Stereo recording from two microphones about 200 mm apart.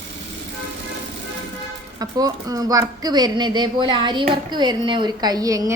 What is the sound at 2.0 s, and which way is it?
Speech, 20° right (ahead or behind).